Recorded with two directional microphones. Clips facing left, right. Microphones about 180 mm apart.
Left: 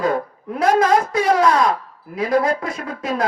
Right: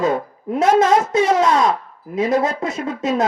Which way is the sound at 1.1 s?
25° right (ahead or behind).